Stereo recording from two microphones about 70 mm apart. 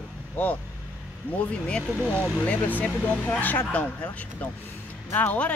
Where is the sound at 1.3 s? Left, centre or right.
Centre.